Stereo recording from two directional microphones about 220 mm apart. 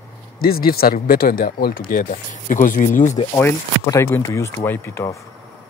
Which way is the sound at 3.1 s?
15° left (ahead or behind).